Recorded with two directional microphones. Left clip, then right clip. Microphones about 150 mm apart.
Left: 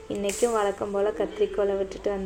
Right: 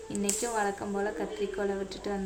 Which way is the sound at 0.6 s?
10° left (ahead or behind).